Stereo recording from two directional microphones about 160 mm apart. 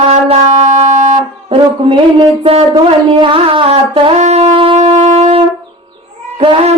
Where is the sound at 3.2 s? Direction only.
35° right (ahead or behind).